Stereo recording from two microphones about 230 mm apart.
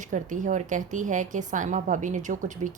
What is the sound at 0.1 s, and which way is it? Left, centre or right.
A woman's voice, right.